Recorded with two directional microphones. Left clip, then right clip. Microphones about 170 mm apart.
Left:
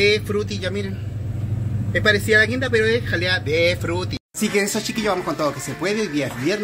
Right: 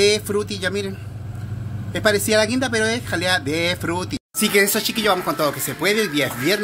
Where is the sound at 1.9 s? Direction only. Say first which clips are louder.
Left 1 dB; 55° right (ahead or behind); by 4.2 s 35° right (ahead or behind).